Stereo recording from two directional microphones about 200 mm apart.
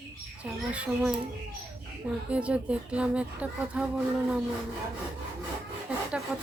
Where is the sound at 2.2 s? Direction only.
5° right (ahead or behind).